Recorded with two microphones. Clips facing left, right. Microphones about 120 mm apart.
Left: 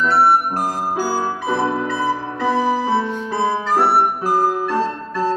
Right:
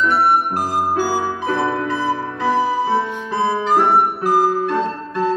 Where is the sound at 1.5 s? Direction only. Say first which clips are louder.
Even; 15° left (ahead or behind).